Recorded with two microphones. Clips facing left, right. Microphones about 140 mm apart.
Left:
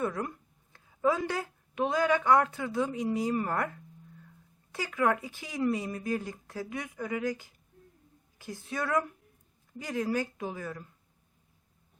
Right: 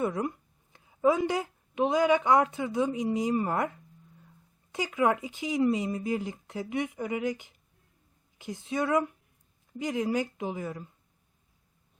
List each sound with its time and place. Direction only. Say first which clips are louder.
0.0 s speech: right 3 dB; 20° right (ahead or behind)